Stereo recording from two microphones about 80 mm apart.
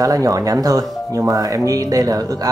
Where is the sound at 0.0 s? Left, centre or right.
Right.